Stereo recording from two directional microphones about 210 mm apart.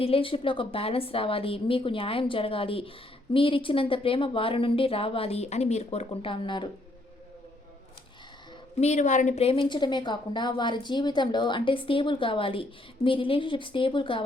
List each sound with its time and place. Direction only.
0.0 s a woman's voice: 25° left (ahead or behind)
8.8 s a woman's voice: 35° left (ahead or behind)